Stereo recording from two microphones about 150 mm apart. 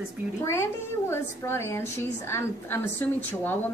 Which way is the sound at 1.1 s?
15° left (ahead or behind).